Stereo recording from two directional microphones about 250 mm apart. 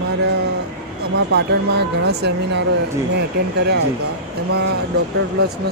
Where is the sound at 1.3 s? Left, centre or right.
Right.